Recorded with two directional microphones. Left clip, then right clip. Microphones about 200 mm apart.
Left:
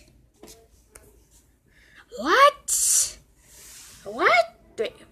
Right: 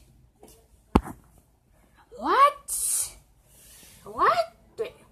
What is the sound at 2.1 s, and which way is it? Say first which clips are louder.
Speech: left 3 dB; 10° left (ahead or behind).